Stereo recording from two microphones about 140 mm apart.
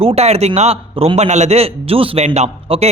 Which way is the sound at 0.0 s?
45° right (ahead or behind).